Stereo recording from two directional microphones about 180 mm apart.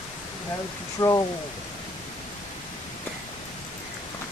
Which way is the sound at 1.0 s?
20° left (ahead or behind).